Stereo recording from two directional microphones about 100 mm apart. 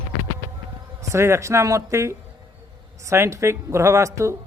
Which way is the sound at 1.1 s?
30° right (ahead or behind).